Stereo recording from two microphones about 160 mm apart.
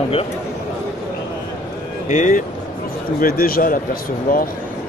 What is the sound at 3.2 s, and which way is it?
Speech, 65° left (ahead or behind).